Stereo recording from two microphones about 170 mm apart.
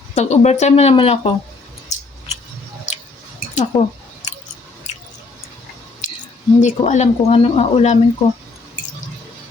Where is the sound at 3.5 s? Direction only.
45° left (ahead or behind).